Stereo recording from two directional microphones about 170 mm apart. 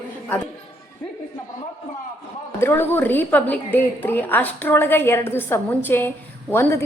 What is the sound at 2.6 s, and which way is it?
A woman's voice, 15° left (ahead or behind).